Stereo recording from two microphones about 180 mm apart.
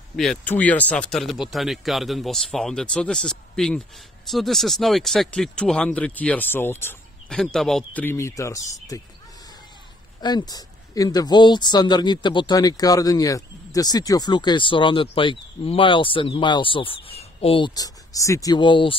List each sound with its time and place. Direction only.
0.1 s a man's voice: centre (ahead or behind); by 8.6 s 15° left (ahead or behind)
10.2 s speech: 20° left (ahead or behind)